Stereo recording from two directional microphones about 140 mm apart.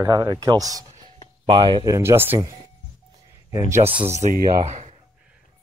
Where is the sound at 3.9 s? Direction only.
50° right (ahead or behind).